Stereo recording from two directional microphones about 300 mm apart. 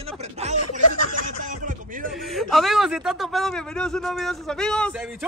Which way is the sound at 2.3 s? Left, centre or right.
Centre.